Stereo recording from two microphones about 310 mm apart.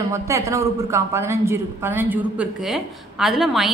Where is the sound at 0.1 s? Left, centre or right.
Centre.